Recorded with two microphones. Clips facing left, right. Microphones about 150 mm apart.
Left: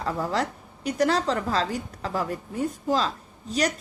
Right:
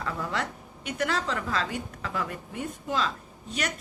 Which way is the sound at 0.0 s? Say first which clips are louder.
Left 5 dB; 35° left (ahead or behind).